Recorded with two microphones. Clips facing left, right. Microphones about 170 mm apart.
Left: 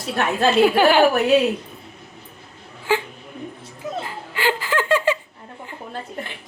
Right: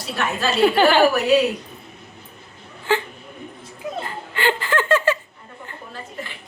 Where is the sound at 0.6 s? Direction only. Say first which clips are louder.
Right 1 dB; 5° left (ahead or behind).